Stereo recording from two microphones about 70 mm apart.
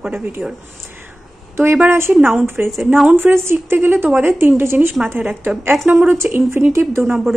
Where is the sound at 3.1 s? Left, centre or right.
Right.